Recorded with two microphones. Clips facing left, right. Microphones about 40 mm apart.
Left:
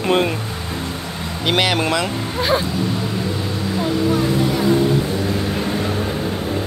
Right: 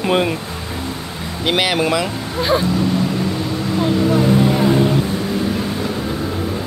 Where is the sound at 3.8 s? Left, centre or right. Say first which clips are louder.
Right 3 dB; centre.